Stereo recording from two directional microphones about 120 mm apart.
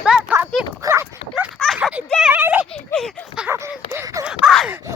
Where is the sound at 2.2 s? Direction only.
15° right (ahead or behind).